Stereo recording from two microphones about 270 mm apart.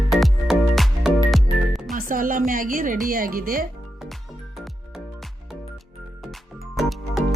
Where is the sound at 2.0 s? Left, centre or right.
Right.